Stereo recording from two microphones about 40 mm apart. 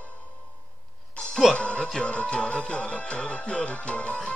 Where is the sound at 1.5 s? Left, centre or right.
Left.